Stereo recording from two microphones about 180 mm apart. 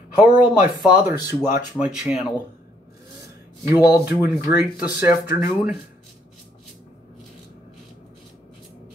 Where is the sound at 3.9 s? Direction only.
10° right (ahead or behind).